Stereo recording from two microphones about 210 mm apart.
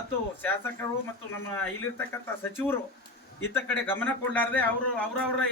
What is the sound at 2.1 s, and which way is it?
A man's voice, 10° left (ahead or behind).